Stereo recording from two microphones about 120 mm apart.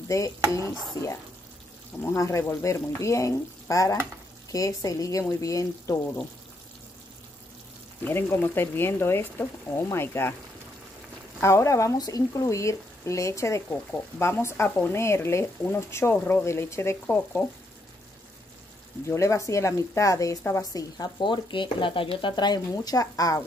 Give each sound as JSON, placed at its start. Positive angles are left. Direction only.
{"t": 0.1, "sound": "speech", "side_deg": 25}
{"t": 8.0, "sound": "speech", "side_deg": 20}
{"t": 11.4, "sound": "speech", "side_deg": 25}
{"t": 19.0, "sound": "speech", "side_deg": 25}